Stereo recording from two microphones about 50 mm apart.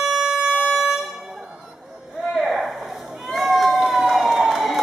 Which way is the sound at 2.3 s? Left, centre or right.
Centre.